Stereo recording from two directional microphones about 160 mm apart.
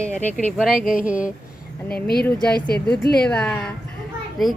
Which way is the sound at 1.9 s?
75° left (ahead or behind).